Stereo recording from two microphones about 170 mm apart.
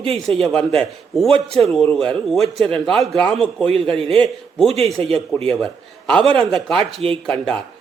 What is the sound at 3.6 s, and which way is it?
Speech, 35° right (ahead or behind).